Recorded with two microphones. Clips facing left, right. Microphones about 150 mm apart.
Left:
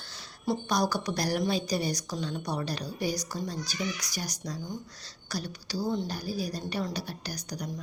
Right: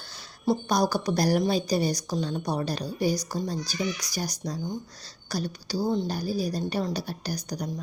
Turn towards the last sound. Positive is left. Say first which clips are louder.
# right 5 dB
turn(degrees=-35)  # may be behind; listen again after turning